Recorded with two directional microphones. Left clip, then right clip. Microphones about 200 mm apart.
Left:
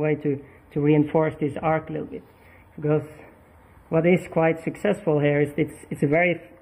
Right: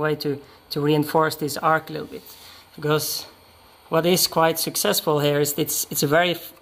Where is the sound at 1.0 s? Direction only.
20° right (ahead or behind).